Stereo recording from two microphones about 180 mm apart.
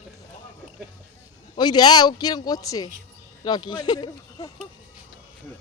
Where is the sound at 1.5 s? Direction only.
25° left (ahead or behind).